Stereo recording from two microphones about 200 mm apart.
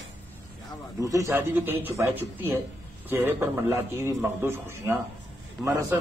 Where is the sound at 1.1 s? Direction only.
15° right (ahead or behind).